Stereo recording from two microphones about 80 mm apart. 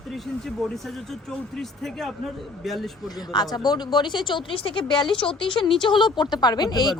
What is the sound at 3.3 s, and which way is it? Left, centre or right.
Speech, left.